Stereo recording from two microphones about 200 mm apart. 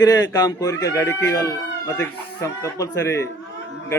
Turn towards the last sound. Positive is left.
turn(degrees=15)  # may be behind; listen again after turning